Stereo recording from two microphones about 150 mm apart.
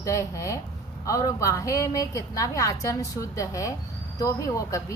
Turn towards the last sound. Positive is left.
turn(degrees=20)  # may be behind; listen again after turning